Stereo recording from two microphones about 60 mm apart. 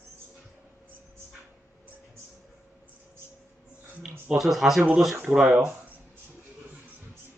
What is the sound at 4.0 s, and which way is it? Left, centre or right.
Speech, centre.